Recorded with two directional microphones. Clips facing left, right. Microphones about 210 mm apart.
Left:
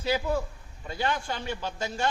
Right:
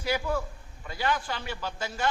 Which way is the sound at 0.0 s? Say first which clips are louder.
Left 2 dB; 25° left (ahead or behind).